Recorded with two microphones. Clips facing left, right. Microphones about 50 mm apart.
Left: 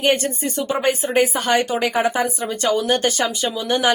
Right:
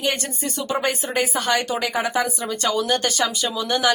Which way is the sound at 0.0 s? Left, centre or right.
Left.